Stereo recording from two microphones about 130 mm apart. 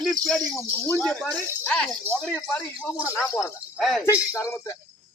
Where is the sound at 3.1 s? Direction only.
25° left (ahead or behind).